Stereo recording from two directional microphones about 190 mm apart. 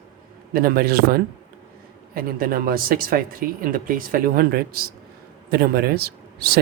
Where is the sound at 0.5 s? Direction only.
50° right (ahead or behind).